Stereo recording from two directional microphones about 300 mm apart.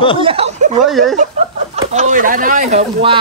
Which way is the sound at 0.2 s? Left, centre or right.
Centre.